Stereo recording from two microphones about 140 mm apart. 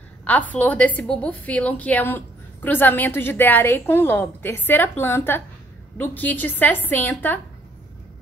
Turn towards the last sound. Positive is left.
turn(degrees=15)  # may be behind; listen again after turning